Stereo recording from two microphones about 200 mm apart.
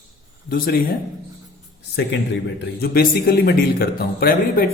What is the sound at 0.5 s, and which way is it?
Speech, 50° left (ahead or behind).